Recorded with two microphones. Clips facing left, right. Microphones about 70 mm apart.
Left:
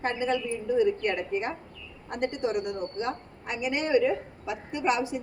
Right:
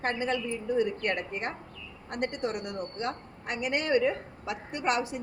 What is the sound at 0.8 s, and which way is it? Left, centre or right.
Speech, right.